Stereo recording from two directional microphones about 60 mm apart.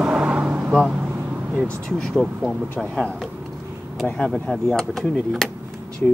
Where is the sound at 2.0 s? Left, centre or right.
Centre.